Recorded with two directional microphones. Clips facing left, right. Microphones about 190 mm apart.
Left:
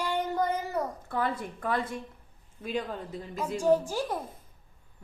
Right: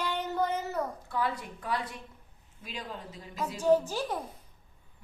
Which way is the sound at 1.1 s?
50° left (ahead or behind).